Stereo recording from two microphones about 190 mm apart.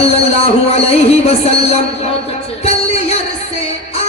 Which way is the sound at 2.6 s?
35° left (ahead or behind).